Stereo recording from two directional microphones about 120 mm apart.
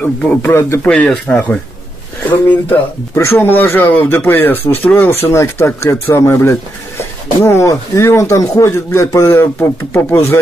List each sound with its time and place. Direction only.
0.2 s speech: 15° left (ahead or behind)
0.8 s speech: 10° left (ahead or behind)
2.7 s speech: 20° left (ahead or behind)